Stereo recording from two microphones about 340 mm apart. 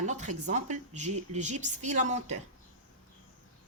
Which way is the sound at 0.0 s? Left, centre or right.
Right.